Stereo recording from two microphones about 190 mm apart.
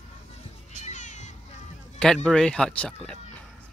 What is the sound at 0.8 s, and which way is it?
Cat, 40° left (ahead or behind).